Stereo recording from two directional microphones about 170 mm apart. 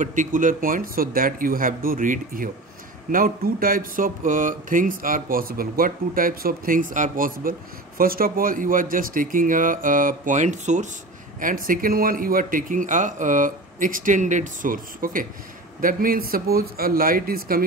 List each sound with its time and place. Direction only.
0.0 s a man's voice: 50° right (ahead or behind)